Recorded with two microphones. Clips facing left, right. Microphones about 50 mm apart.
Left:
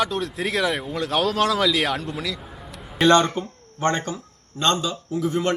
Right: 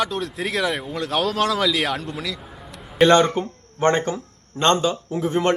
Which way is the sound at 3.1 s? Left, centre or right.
Right.